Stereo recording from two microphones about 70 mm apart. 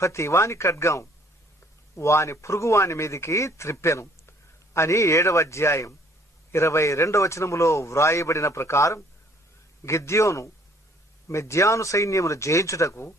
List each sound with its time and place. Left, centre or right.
0.0 s speech: left